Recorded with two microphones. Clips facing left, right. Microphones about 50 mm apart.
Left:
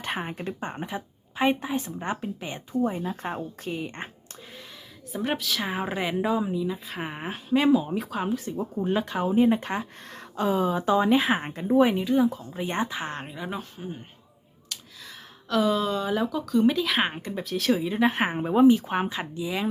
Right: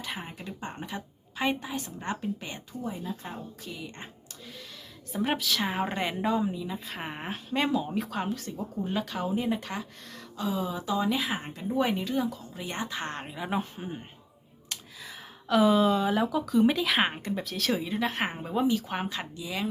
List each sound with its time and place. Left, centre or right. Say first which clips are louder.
0.0 s speech: left 7 dB; left
0.7 s a woman's voice: left 4 dB; left
2.7 s speech: left 9 dB; left
5.1 s speech: even; centre
8.4 s a woman's voice: left 5 dB; centre; by 11.8 s left
11.8 s speech: left 6 dB; centre
12.3 s a woman's voice: left 6 dB; left
12.9 s speech: left 2 dB; centre
13.5 s speech: right 3 dB; right
14.7 s a sound: even; right
15.0 s speech: right 2 dB; centre
17.9 s a woman's voice: left 6 dB; centre